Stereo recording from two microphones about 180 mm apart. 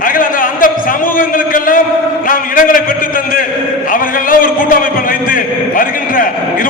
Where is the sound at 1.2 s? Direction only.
50° left (ahead or behind).